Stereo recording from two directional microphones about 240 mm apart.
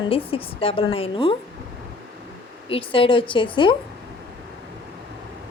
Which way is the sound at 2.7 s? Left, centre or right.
Left.